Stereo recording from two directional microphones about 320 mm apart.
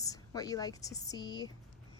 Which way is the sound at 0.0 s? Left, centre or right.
Centre.